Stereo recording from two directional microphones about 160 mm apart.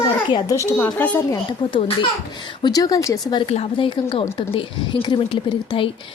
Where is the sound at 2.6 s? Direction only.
25° left (ahead or behind).